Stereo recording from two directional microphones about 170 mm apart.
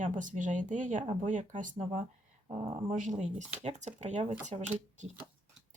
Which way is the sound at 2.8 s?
50° right (ahead or behind).